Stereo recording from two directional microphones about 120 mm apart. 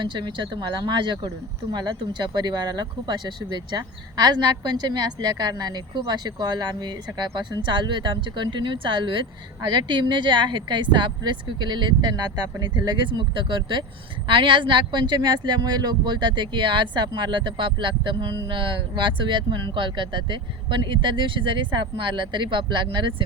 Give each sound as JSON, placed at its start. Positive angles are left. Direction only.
{"t": 0.0, "sound": "speech", "side_deg": -40}